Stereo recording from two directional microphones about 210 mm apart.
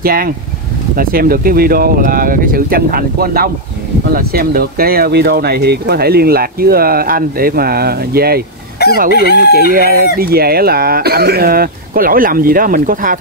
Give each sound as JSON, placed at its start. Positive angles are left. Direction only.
{"t": 0.0, "sound": "speech", "side_deg": -45}
{"t": 8.8, "sound": "chicken", "side_deg": 50}
{"t": 9.7, "sound": "speech", "side_deg": -45}